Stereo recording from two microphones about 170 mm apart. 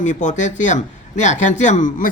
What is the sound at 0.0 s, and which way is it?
Speech, 45° left (ahead or behind).